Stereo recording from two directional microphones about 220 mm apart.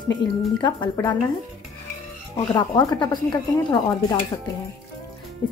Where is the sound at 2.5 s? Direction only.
20° left (ahead or behind).